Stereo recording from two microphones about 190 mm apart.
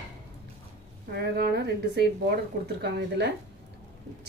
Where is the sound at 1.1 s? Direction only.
55° right (ahead or behind).